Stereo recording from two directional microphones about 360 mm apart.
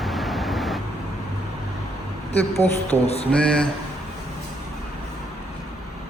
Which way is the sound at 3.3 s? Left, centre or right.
Centre.